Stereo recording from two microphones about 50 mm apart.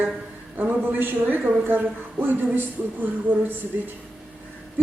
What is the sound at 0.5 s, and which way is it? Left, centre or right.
A woman's voice, right.